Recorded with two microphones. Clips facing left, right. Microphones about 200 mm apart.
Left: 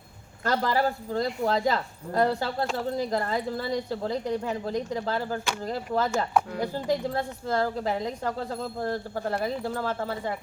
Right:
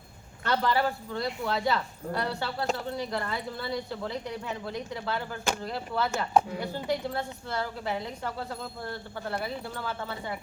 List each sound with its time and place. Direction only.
0.4 s a woman's voice: 40° left (ahead or behind)